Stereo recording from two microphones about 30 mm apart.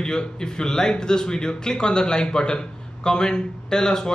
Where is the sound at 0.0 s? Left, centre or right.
Left.